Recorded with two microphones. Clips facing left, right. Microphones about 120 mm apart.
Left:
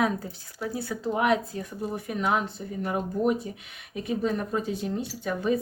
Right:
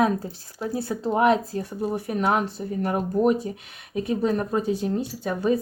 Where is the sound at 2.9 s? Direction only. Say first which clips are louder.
Right 4 dB; 55° right (ahead or behind).